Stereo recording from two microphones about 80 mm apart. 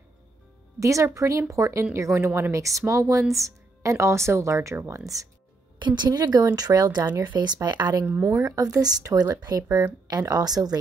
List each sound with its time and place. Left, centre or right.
0.7 s speech: right
5.8 s a woman's voice: right
6.0 s speech: right
8.3 s speech: right